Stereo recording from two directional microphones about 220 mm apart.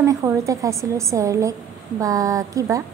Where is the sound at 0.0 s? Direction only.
15° right (ahead or behind).